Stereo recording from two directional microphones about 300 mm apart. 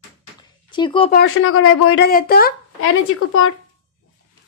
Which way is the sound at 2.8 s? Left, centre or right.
Left.